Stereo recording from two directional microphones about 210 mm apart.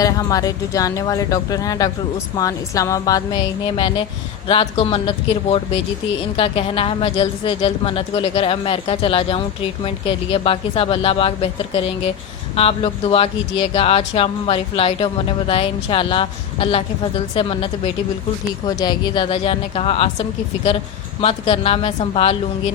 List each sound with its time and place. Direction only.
0.0 s speech: 15° left (ahead or behind)
18.8 s speech: 20° left (ahead or behind)
21.2 s speech: 25° left (ahead or behind)